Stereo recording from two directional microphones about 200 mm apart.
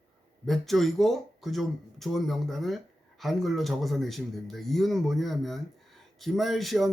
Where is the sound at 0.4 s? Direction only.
Centre (ahead or behind).